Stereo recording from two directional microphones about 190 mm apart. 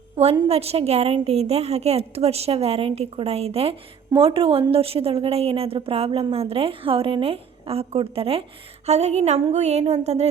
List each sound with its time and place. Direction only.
0.2 s a woman's voice: 30° right (ahead or behind)